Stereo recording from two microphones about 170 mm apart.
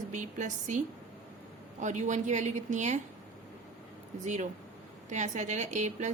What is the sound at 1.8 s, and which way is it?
A woman's voice, 45° right (ahead or behind).